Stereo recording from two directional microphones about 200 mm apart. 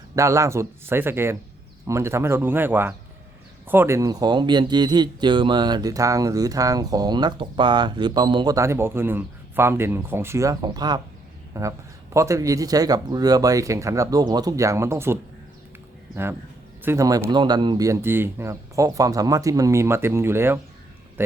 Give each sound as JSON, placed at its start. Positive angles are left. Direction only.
{"t": 0.2, "sound": "speech", "side_deg": -15}
{"t": 16.8, "sound": "speech", "side_deg": -15}